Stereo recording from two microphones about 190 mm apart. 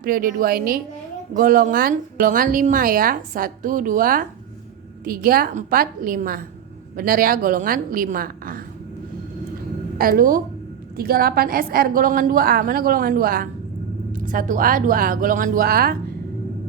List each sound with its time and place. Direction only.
0.0 s a woman's voice: 50° right (ahead or behind)
10.0 s a woman's voice: 50° right (ahead or behind)